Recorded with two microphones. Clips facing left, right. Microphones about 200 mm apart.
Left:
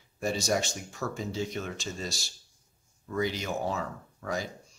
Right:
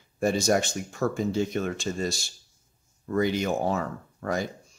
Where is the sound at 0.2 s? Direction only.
55° right (ahead or behind).